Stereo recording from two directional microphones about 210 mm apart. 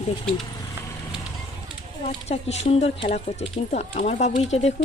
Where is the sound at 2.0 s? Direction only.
30° left (ahead or behind).